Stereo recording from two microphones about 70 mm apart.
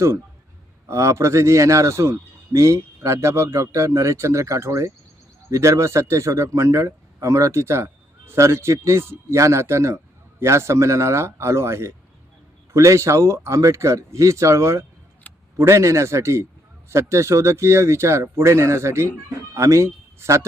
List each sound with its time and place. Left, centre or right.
0.9 s speech: right